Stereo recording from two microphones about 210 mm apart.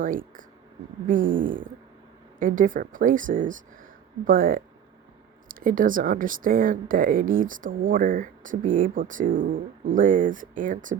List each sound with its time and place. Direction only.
0.0 s speech: 40° right (ahead or behind)